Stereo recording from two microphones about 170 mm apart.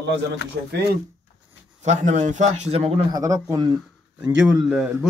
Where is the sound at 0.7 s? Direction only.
80° right.